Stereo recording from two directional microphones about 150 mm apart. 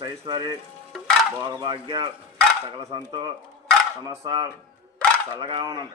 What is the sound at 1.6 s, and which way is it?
Speech, 30° right (ahead or behind).